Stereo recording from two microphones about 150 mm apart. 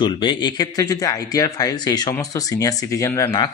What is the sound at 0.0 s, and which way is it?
Speech, 30° left (ahead or behind).